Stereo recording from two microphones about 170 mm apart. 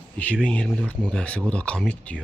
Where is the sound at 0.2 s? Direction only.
5° left (ahead or behind).